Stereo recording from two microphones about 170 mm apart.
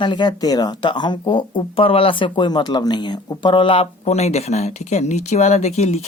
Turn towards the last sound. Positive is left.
turn(degrees=40)  # may be behind; listen again after turning